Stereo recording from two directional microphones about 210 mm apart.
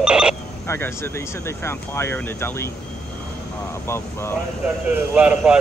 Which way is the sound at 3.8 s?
10° left (ahead or behind).